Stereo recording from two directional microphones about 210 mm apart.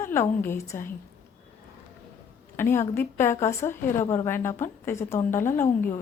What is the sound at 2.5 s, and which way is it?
A woman's voice, 10° left (ahead or behind).